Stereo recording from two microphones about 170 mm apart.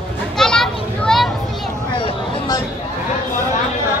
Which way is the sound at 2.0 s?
25° left (ahead or behind).